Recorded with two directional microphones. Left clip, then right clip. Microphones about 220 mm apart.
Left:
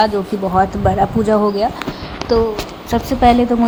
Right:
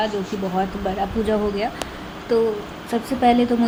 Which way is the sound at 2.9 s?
10° left (ahead or behind).